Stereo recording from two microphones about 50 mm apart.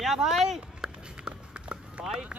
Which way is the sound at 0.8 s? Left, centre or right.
Right.